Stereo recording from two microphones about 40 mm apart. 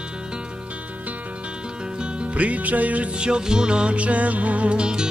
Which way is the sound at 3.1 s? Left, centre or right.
Right.